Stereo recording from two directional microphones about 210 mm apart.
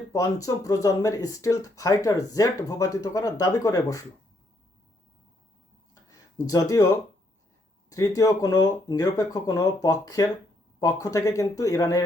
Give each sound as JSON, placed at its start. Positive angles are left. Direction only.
{"t": 0.1, "sound": "speech", "side_deg": 15}
{"t": 5.9, "sound": "a sound", "side_deg": 15}
{"t": 7.9, "sound": "speech", "side_deg": 15}